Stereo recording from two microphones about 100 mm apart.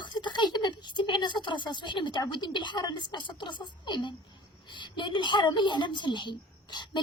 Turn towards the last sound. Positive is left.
turn(degrees=45)  # may be behind; listen again after turning